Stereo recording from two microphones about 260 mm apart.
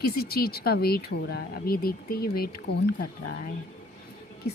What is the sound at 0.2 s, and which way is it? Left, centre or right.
Speech, left.